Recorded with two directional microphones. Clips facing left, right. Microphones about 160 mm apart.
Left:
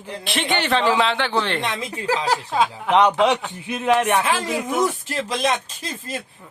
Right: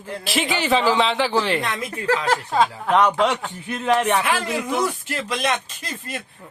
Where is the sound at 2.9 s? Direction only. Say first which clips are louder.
Left 4 dB; 20° left (ahead or behind).